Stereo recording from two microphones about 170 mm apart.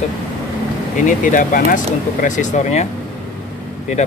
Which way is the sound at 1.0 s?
50° left (ahead or behind).